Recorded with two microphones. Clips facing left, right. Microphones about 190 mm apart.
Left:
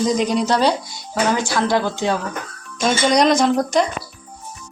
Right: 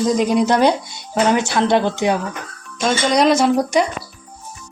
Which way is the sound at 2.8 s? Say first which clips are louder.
Even; centre (ahead or behind).